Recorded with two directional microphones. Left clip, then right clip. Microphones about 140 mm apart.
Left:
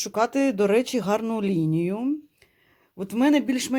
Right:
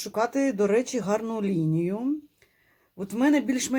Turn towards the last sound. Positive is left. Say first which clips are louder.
# left 2 dB
turn(degrees=25)  # may be behind; listen again after turning